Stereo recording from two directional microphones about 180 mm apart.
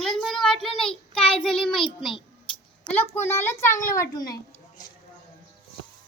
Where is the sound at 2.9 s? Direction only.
10° left (ahead or behind).